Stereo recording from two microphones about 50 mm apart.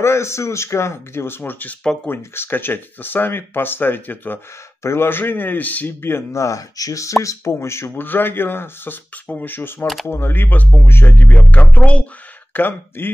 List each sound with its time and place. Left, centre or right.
0.0 s speech: left
4.8 s speech: left
6.3 s speech: left
7.9 s speech: left